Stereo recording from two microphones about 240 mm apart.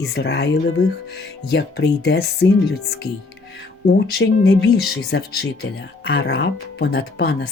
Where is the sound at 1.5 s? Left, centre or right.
Left.